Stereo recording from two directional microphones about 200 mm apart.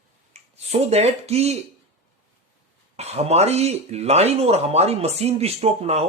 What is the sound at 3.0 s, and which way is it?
Speech, 30° right (ahead or behind).